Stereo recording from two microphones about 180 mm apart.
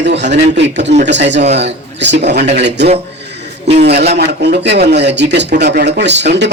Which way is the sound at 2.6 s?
70° right (ahead or behind).